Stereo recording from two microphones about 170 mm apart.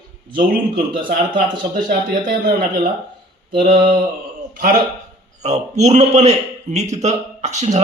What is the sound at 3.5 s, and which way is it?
Mantra, 65° right (ahead or behind).